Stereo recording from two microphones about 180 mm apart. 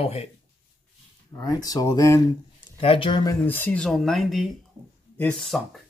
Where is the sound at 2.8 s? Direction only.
30° left (ahead or behind); by 5.8 s centre (ahead or behind).